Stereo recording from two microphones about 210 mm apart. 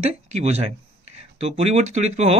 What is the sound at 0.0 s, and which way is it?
Speech, 30° right (ahead or behind).